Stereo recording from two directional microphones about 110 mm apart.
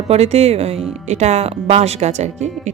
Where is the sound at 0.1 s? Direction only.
75° right (ahead or behind).